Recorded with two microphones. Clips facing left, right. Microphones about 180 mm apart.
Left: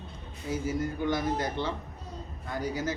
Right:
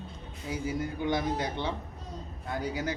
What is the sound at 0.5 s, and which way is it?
A man's voice, 15° right (ahead or behind).